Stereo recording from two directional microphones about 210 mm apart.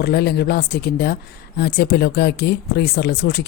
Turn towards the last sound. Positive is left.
turn(degrees=50)  # may be behind; listen again after turning